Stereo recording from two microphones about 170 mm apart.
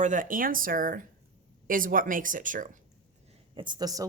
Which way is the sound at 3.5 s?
30° right (ahead or behind).